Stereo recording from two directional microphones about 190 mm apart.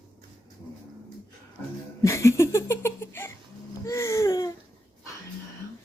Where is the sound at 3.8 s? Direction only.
15° left (ahead or behind).